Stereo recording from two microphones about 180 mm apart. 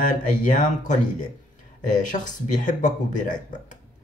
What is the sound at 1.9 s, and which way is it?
Speech, 45° left (ahead or behind).